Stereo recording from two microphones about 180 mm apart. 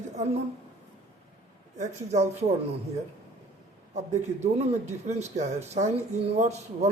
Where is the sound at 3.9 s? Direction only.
40° right (ahead or behind).